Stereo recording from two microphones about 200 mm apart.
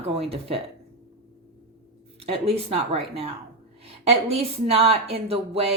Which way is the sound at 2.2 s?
30° right (ahead or behind).